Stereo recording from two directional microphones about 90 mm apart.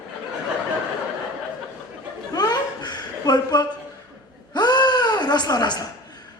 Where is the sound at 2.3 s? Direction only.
50° left (ahead or behind).